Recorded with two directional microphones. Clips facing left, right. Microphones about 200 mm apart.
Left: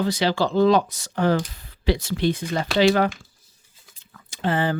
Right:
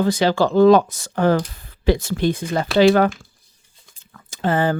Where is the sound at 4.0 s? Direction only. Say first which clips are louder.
Right 3 dB; 45° right (ahead or behind).